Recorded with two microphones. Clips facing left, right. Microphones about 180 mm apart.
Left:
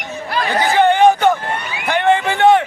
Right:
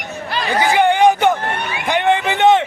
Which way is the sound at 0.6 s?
15° right (ahead or behind).